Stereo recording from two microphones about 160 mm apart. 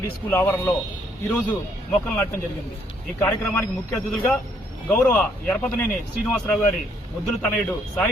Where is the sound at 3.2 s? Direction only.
10° left (ahead or behind).